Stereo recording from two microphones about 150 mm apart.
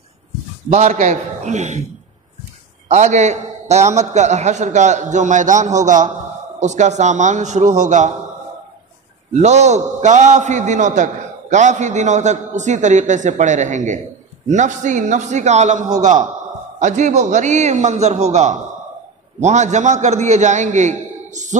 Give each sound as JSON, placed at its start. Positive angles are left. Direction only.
{"t": 0.7, "sound": "a man's voice", "side_deg": -50}
{"t": 2.9, "sound": "a man's voice", "side_deg": -50}
{"t": 9.3, "sound": "a man's voice", "side_deg": -50}